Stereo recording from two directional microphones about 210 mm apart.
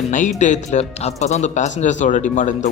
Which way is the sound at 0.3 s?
35° left (ahead or behind).